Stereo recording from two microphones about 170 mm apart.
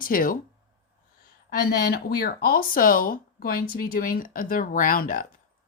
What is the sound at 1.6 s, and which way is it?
Speech, 65° left (ahead or behind).